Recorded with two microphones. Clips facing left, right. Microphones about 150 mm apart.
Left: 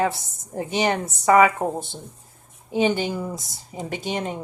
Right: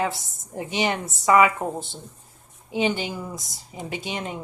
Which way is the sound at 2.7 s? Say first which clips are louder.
Left 3 dB; 45° left (ahead or behind).